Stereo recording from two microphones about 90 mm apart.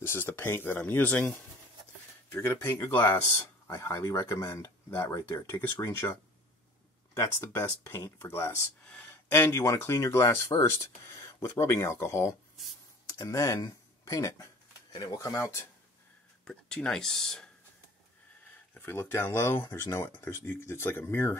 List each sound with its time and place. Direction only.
0.0 s speech: 25° left (ahead or behind)
5.1 s speech: 40° left (ahead or behind)
5.6 s speech: 30° left (ahead or behind)
7.2 s speech: 30° left (ahead or behind)
8.8 s speech: 20° left (ahead or behind); by 14.5 s 35° left (ahead or behind)
14.9 s speech: 45° left (ahead or behind)
16.4 s speech: 10° left (ahead or behind)
18.8 s speech: 25° left (ahead or behind)